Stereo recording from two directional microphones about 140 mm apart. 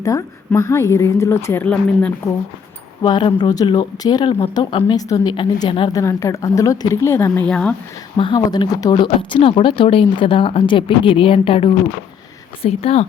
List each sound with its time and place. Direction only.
0.0 s a woman's voice: 25° left (ahead or behind)
3.0 s speech: 35° left (ahead or behind)
5.9 s a woman's voice: 20° left (ahead or behind)
7.4 s speech: 5° left (ahead or behind)
8.1 s speech: 35° left (ahead or behind)
9.0 s speech: 40° left (ahead or behind)